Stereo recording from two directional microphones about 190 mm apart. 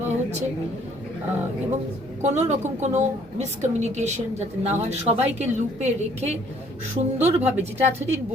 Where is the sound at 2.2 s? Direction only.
35° right (ahead or behind).